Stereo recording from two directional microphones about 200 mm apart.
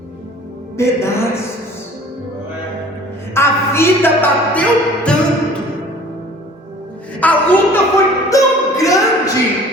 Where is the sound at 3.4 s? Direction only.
10° left (ahead or behind).